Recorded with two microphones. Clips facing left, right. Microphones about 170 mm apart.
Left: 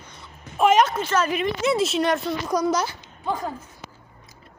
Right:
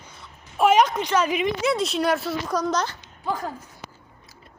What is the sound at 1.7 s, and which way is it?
Speech, centre (ahead or behind).